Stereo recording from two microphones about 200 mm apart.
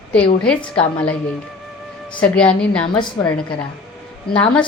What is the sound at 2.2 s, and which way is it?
Speech, 5° left (ahead or behind).